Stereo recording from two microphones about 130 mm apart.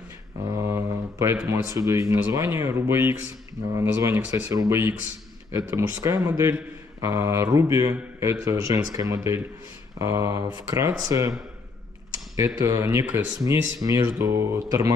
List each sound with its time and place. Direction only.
0.5 s a man's voice: 25° right (ahead or behind)
12.5 s a man's voice: 25° right (ahead or behind)